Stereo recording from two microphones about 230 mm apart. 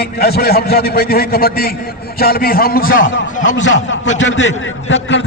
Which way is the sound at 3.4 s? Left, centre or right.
Left.